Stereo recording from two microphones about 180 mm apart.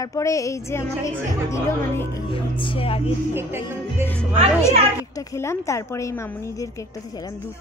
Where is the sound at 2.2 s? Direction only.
30° left (ahead or behind).